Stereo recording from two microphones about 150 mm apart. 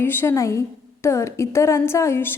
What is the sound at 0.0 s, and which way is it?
A woman's voice, 15° left (ahead or behind).